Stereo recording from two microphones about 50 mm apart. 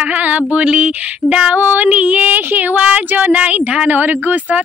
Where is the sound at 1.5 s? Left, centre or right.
Right.